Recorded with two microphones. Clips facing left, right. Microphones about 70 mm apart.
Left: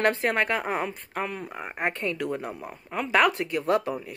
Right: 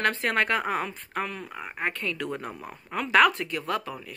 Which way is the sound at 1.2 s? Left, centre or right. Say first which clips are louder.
Left 2 dB; centre.